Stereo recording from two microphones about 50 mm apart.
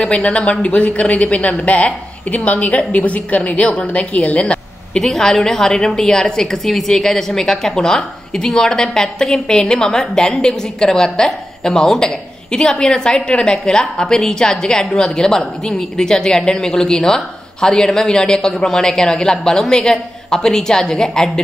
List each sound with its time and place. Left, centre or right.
0.0 s speech: left
4.9 s a woman's voice: centre